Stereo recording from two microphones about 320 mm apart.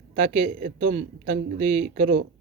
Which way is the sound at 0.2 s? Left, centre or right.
Right.